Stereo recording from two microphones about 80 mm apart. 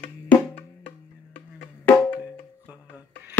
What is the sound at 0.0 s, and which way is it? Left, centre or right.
Music, left.